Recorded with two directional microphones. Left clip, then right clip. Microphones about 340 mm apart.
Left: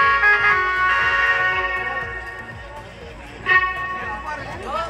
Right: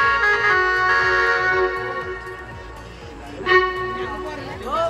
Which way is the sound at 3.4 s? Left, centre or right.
Centre.